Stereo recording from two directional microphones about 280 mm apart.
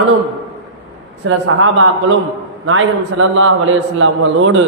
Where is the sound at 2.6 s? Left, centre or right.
Right.